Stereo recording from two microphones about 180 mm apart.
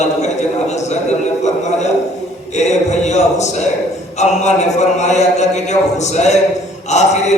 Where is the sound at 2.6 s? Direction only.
40° left (ahead or behind).